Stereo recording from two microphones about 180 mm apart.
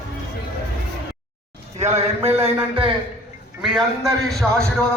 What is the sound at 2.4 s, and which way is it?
Speech, 30° right (ahead or behind).